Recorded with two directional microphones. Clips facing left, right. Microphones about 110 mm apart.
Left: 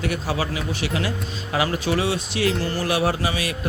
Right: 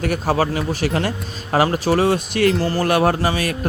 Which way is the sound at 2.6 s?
40° right (ahead or behind).